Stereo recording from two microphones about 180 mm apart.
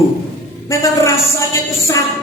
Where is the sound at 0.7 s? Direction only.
15° left (ahead or behind).